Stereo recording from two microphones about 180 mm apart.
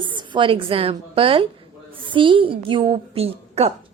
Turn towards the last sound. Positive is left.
turn(degrees=-35)  # may be behind; listen again after turning